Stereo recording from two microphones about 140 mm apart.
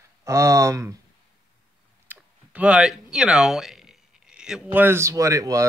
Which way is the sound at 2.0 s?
10° right (ahead or behind).